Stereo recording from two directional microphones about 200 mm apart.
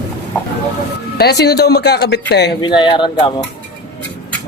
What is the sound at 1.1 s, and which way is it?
Speech, 55° left (ahead or behind).